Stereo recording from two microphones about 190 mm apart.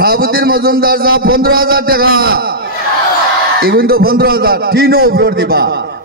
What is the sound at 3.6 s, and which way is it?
A man's voice, 55° right (ahead or behind).